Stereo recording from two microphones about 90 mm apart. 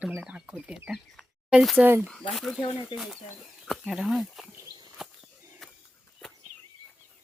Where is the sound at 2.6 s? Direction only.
60° left (ahead or behind).